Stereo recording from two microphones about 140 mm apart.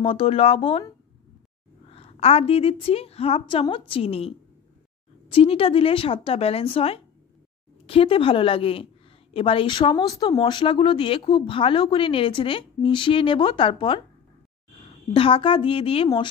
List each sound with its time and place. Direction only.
0.0 s speech: 40° left (ahead or behind)
1.9 s a woman's voice: 45° left (ahead or behind)
15.1 s speech: 40° left (ahead or behind)